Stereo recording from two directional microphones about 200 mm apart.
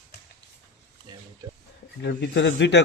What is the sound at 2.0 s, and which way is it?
Speech, 60° left (ahead or behind).